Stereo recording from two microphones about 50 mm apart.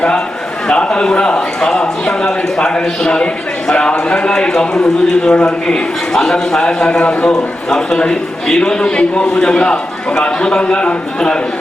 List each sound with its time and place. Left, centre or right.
0.7 s a man's voice: centre
7.0 s a man's voice: left
7.3 s a man's voice: centre